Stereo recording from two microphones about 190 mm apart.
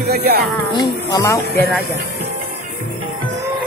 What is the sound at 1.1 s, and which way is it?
Speech, 20° left (ahead or behind).